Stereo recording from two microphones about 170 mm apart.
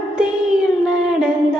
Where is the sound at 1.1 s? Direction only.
5° right (ahead or behind).